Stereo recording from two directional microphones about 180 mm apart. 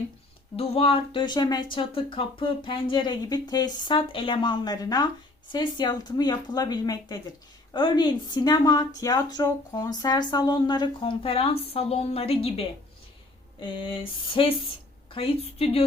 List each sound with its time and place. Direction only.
0.5 s a woman's voice: 35° left (ahead or behind)